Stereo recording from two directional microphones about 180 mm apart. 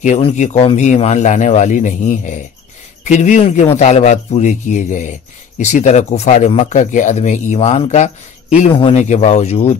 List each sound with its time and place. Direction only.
0.0 s speech: 40° left (ahead or behind)